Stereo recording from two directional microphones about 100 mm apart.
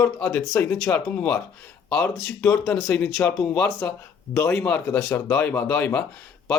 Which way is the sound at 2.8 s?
5° left (ahead or behind).